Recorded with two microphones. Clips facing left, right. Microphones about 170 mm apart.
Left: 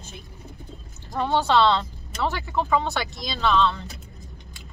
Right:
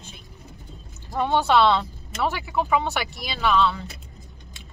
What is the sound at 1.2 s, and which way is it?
Speech, 15° right (ahead or behind).